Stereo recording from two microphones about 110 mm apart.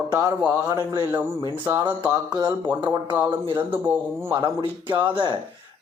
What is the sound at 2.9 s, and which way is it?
Speech, 35° right (ahead or behind).